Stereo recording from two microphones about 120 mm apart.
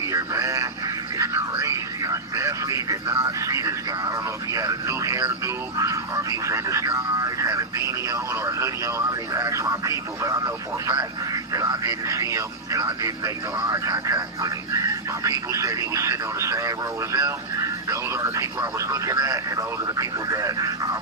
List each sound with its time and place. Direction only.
0.1 s speech: 25° right (ahead or behind)
11.5 s radio: 30° right (ahead or behind)
12.0 s speech: 25° right (ahead or behind)